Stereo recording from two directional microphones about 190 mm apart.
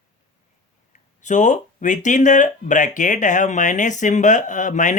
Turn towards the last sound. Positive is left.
turn(degrees=40)  # may be behind; listen again after turning